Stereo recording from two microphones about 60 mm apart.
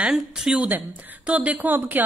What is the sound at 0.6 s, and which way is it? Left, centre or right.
A woman's voice, right.